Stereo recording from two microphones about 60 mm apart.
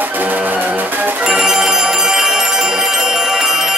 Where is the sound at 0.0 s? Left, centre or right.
Right.